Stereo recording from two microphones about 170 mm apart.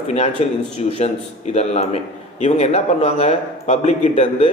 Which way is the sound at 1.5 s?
40° left (ahead or behind).